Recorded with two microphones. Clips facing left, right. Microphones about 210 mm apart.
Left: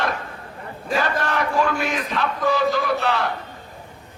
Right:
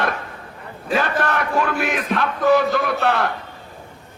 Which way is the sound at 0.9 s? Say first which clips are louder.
Right 2 dB; 55° right (ahead or behind).